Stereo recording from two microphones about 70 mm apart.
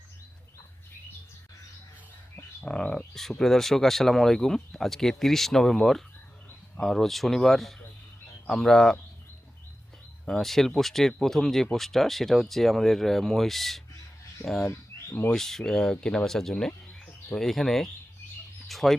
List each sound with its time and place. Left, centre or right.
2.3 s bird: centre
3.2 s speech: centre
10.2 s speech: centre
14.7 s bird: left
15.4 s speech: centre